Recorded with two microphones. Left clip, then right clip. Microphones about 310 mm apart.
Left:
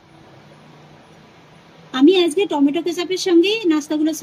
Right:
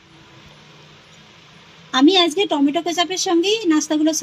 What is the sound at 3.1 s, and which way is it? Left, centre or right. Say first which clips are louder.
Speech: left 6 dB; right.